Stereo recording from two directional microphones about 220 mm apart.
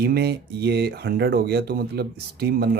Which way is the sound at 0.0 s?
45° right (ahead or behind).